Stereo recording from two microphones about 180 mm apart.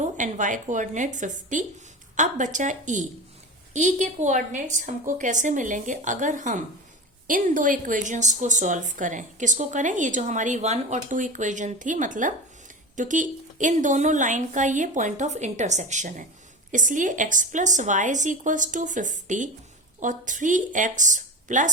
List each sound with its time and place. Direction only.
0.0 s speech: 45° right (ahead or behind)